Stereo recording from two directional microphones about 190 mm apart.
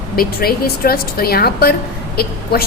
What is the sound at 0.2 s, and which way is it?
A woman's voice, 55° left (ahead or behind).